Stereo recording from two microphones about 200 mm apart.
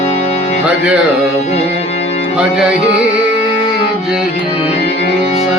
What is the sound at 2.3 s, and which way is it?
Music, 5° right (ahead or behind).